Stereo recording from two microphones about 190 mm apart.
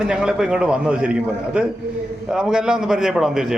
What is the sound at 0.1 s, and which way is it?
A man's voice, 5° right (ahead or behind).